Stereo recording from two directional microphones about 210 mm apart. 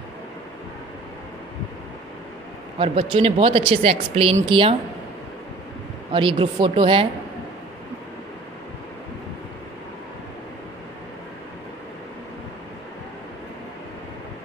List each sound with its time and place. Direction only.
2.8 s speech: 25° right (ahead or behind)
6.1 s speech: 25° right (ahead or behind)